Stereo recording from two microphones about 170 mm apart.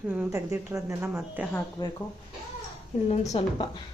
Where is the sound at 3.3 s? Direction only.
40° left (ahead or behind).